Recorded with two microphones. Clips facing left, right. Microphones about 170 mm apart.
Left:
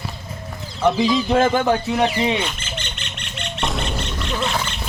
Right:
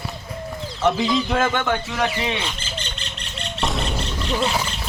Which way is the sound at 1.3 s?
35° left (ahead or behind).